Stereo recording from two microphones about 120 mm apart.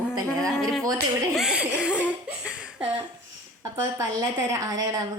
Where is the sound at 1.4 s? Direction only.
5° right (ahead or behind).